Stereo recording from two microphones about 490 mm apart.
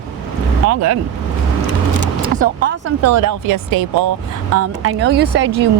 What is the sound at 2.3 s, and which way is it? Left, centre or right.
Speech, centre.